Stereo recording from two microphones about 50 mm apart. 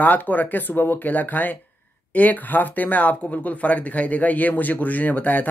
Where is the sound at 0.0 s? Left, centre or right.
Left.